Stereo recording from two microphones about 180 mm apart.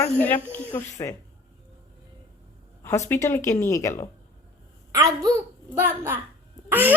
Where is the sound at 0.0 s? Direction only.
10° left (ahead or behind).